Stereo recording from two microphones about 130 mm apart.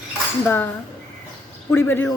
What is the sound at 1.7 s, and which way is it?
Speech, 15° left (ahead or behind).